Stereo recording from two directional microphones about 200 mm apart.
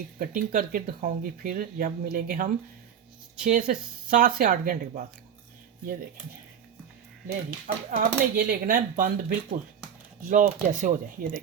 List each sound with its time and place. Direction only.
0.2 s speech: 40° right (ahead or behind)
7.9 s speech: 45° right (ahead or behind)